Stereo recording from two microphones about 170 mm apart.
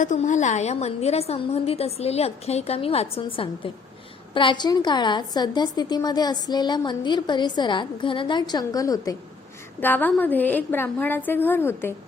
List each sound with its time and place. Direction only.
0.0 s a woman's voice: 45° left (ahead or behind); by 11.9 s 15° left (ahead or behind)